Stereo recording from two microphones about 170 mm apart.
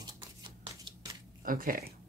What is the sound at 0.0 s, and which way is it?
Shuffling cards, 25° right (ahead or behind).